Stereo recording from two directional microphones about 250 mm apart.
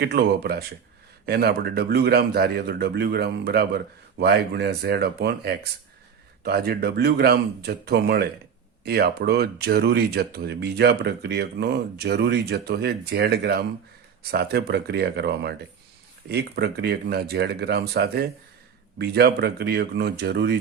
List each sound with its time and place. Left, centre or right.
0.0 s speech: right